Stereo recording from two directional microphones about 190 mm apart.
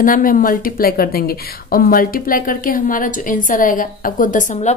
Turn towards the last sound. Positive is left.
turn(degrees=40)  # may be behind; listen again after turning